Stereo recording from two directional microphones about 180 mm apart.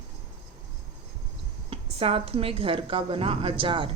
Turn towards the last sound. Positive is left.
turn(degrees=-30)  # may be behind; listen again after turning